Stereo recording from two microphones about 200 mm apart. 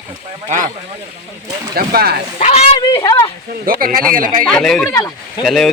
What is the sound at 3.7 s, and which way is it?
Speech, 45° right (ahead or behind).